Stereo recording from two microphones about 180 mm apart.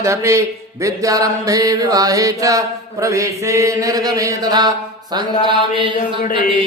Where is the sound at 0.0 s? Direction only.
15° right (ahead or behind).